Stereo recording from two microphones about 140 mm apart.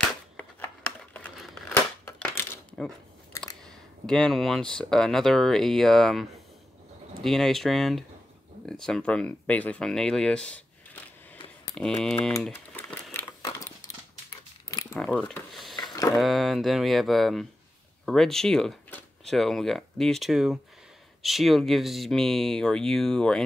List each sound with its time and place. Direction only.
0.4 s a sound: 10° left (ahead or behind)
2.8 s speech: 5° left (ahead or behind)
12.4 s typing: 10° left (ahead or behind)
13.4 s keys jangling: 25° left (ahead or behind)
15.0 s a sound: 5° left (ahead or behind)
16.2 s speech: centre (ahead or behind)